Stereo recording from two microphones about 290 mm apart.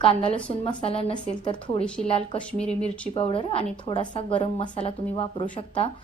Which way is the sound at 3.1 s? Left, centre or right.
Centre.